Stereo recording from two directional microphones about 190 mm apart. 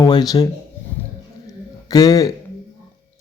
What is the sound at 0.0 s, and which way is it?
Speech, 20° left (ahead or behind).